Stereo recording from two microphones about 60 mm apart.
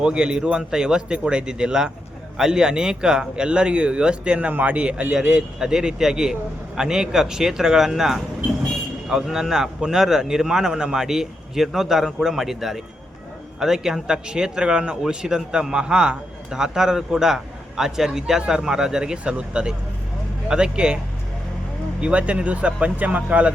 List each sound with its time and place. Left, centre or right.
0.0 s a man's voice: centre
22.0 s speech: centre